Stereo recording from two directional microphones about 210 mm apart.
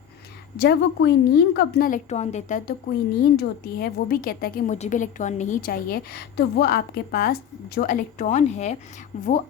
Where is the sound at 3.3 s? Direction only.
45° left (ahead or behind).